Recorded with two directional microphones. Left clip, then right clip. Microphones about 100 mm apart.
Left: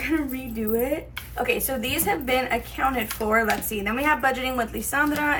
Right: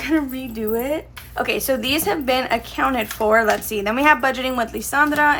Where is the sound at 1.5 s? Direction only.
85° right.